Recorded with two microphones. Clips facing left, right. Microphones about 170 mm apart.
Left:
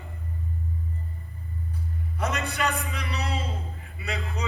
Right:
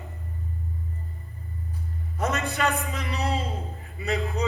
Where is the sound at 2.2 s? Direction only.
40° right (ahead or behind).